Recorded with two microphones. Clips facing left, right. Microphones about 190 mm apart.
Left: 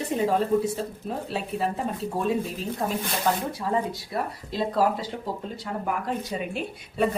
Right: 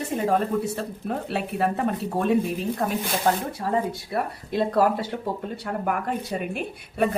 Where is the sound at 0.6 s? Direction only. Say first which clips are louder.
Even; 65° right (ahead or behind).